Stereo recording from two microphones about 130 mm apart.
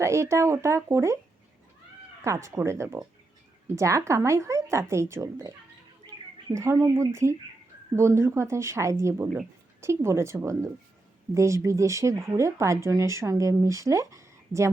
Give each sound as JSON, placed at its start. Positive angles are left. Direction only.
{"t": 0.0, "sound": "speech", "side_deg": -20}
{"t": 2.2, "sound": "speech", "side_deg": -25}